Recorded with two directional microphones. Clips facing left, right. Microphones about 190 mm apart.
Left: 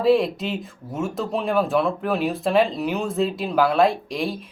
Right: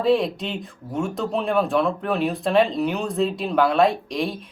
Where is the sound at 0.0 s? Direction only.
Centre (ahead or behind).